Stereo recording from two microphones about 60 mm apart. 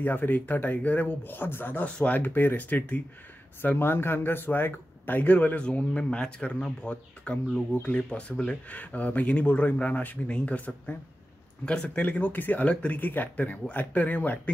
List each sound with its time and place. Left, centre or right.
0.0 s speech: left
1.9 s speech: centre
5.7 s speech: centre